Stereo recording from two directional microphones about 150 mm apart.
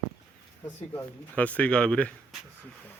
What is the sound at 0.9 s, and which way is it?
Speech, 10° left (ahead or behind).